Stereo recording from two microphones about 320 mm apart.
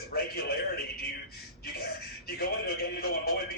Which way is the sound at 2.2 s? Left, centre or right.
Left.